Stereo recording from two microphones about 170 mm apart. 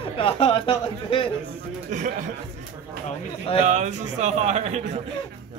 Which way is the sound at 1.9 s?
45° right (ahead or behind).